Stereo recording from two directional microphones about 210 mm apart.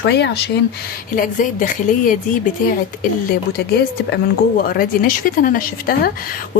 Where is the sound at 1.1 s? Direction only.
40° left (ahead or behind).